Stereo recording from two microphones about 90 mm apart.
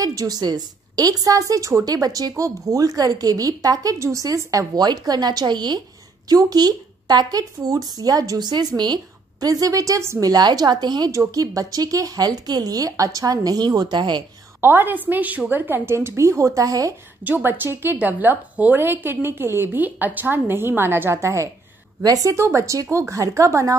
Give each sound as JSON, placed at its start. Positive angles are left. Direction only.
{"t": 0.0, "sound": "a woman's voice", "side_deg": -40}
{"t": 11.1, "sound": "a woman's voice", "side_deg": -40}
{"t": 14.6, "sound": "a woman's voice", "side_deg": -25}
{"t": 17.2, "sound": "a woman's voice", "side_deg": -20}